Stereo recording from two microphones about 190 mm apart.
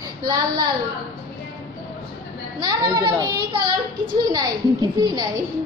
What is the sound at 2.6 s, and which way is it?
A child's voice, 20° right (ahead or behind).